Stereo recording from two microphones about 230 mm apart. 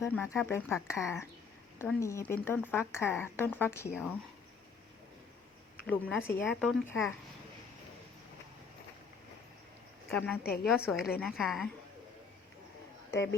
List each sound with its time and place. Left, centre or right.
0.0 s speech: centre
5.8 s speech: centre
10.1 s speech: centre
10.4 s a woman's voice: left
10.7 s speech: centre